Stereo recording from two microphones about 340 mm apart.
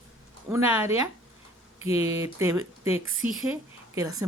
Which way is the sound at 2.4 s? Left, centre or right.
Centre.